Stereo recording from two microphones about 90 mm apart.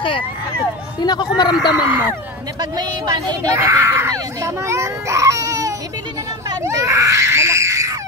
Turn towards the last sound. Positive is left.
turn(degrees=-35)  # may be behind; listen again after turning